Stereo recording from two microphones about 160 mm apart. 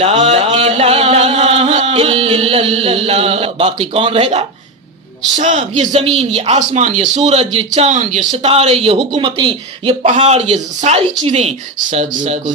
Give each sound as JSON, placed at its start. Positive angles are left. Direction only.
{"t": 0.0, "sound": "a sound", "side_deg": -40}
{"t": 5.4, "sound": "speech", "side_deg": -50}
{"t": 10.0, "sound": "speech", "side_deg": -40}